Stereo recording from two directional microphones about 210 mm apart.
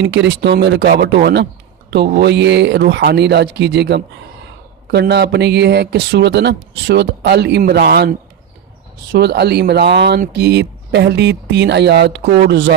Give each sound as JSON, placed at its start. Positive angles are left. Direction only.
{"t": 0.0, "sound": "speech", "side_deg": -55}